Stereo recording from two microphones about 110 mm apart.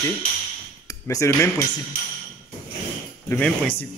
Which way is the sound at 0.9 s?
30° left (ahead or behind).